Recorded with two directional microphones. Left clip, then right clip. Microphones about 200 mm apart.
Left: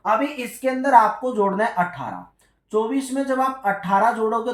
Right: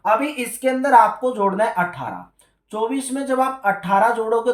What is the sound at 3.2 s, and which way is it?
Speech, 35° right (ahead or behind).